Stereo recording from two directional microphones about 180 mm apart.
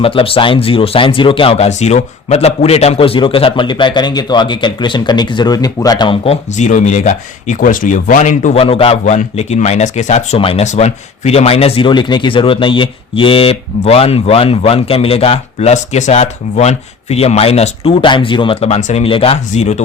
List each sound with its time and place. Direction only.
0.0 s a man's voice: 30° left (ahead or behind)